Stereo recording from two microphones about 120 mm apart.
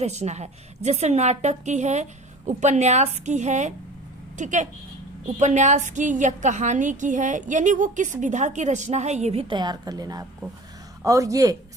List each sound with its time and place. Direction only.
0.0 s a woman's voice: 70° right (ahead or behind)
2.5 s a woman's voice: 85° right; by 9.5 s 65° right (ahead or behind)
9.5 s a woman's voice: 35° right (ahead or behind)